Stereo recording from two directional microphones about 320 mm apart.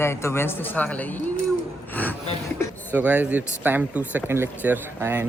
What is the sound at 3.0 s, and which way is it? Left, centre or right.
Speech, centre.